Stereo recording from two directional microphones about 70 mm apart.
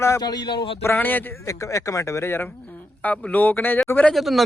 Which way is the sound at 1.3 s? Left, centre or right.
Left.